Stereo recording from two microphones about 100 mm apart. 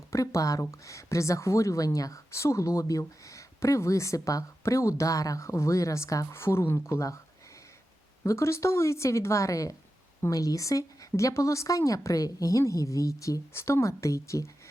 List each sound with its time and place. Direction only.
0.1 s speech: 30° left (ahead or behind)
8.2 s a woman's voice: 30° left (ahead or behind)